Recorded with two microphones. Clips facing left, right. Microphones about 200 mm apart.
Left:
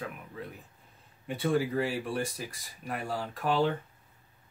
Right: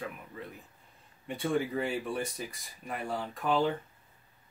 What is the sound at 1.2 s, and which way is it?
Speech, 5° left (ahead or behind).